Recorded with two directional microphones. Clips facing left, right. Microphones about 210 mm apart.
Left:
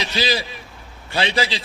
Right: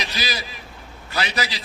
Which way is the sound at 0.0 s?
30° left (ahead or behind).